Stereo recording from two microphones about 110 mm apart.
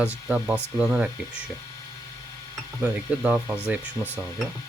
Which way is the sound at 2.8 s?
10° right (ahead or behind).